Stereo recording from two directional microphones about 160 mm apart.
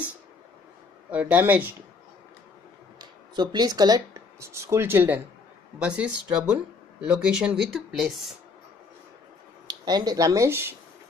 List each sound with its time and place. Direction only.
1.1 s speech: 10° right (ahead or behind)
3.0 s speech: 25° right (ahead or behind); by 8.4 s centre (ahead or behind)
9.7 s speech: 25° right (ahead or behind)